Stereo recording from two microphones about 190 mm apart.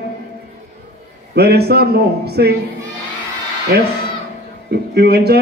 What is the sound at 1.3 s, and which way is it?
A man's voice, 60° right (ahead or behind).